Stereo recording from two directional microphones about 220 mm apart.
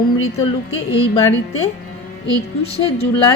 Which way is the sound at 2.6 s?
25° left (ahead or behind).